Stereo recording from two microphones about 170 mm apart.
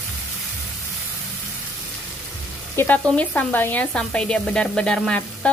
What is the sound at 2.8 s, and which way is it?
Speech, 10° left (ahead or behind).